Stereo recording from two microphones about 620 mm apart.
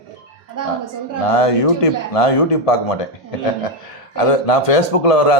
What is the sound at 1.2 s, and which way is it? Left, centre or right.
A man's voice, left.